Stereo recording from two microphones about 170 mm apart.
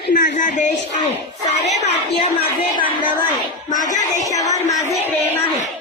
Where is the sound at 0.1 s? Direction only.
50° left (ahead or behind).